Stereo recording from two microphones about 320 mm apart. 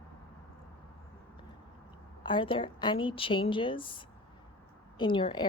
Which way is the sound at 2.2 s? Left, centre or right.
Centre.